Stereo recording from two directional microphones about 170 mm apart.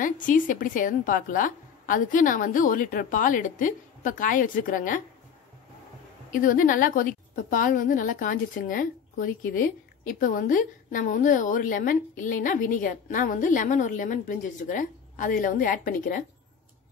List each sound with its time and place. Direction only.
0.0 s a woman's voice: 50° left (ahead or behind)
6.3 s a woman's voice: 50° left (ahead or behind)